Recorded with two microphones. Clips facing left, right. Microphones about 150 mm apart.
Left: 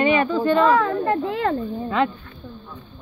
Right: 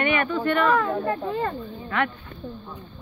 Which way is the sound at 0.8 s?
90° left.